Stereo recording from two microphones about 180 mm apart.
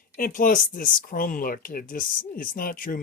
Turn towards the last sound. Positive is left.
turn(degrees=50)  # may be behind; listen again after turning